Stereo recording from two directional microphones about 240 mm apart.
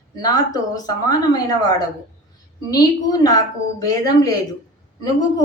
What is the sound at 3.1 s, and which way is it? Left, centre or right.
Speech, centre.